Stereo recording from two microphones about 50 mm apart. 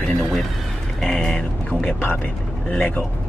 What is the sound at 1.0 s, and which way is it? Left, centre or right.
Speech, centre.